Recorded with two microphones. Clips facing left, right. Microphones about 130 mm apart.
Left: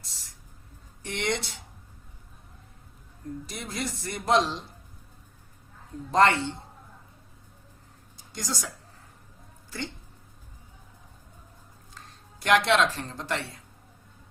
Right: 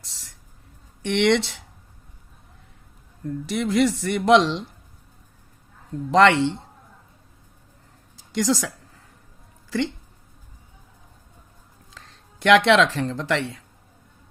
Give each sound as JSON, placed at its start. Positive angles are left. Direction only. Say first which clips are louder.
{"t": 1.0, "sound": "speech", "louder": "right 11 dB", "side_deg": -90}
{"t": 3.4, "sound": "speech", "louder": "right 16 dB", "side_deg": -90}
{"t": 6.1, "sound": "speech", "louder": "right 5 dB", "side_deg": -90}
{"t": 8.3, "sound": "a woman's voice", "louder": "right 12 dB", "side_deg": -90}
{"t": 11.9, "sound": "speech", "louder": "right 2 dB", "side_deg": -90}